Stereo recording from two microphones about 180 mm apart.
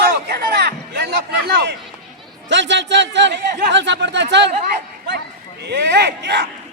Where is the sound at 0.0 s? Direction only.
60° right (ahead or behind).